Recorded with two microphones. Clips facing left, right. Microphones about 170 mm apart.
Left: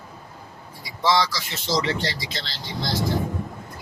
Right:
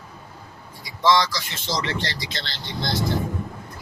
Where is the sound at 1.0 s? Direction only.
10° left (ahead or behind).